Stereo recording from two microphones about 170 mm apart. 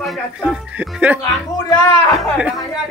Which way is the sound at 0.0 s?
Centre (ahead or behind).